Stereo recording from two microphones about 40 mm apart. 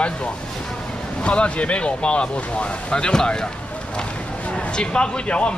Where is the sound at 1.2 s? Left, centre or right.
Left.